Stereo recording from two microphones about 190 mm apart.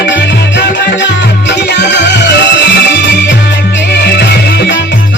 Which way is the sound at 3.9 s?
60° left (ahead or behind).